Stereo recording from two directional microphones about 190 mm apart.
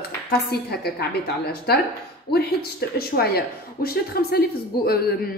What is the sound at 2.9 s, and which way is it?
A woman's voice, 55° left (ahead or behind).